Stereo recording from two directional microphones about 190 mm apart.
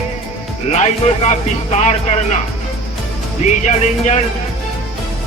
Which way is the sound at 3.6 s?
40° left (ahead or behind).